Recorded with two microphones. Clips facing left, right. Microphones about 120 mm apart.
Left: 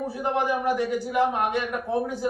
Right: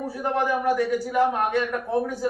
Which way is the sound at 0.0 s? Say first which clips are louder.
Right 1 dB; 15° left (ahead or behind).